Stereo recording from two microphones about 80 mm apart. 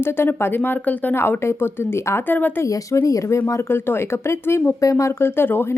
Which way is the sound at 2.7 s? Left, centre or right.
Left.